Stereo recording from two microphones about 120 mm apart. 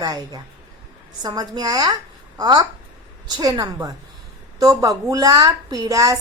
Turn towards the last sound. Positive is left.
turn(degrees=-30)  # may be behind; listen again after turning